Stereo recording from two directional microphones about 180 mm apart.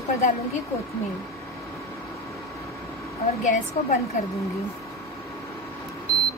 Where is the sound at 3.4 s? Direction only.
40° left (ahead or behind).